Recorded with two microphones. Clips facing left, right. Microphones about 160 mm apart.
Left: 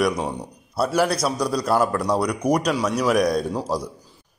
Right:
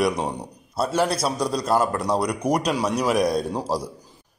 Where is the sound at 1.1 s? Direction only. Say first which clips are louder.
Left 1 dB; 25° right (ahead or behind).